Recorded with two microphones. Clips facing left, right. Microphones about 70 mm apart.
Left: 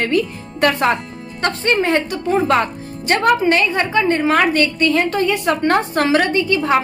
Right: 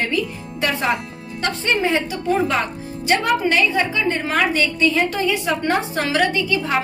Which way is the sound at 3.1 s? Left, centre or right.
Left.